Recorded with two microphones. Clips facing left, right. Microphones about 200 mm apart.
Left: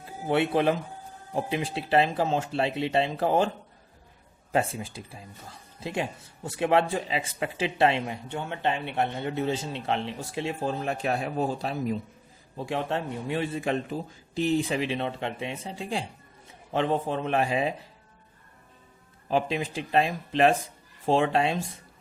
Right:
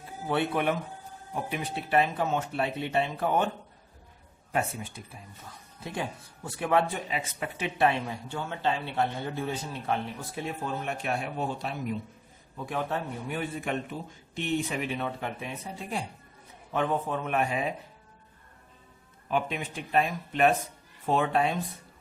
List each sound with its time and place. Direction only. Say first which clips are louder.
0.3 s speech: left 4 dB; 25° left (ahead or behind)
4.5 s speech: left 4 dB; 30° left (ahead or behind)
19.3 s speech: left 4 dB; 30° left (ahead or behind)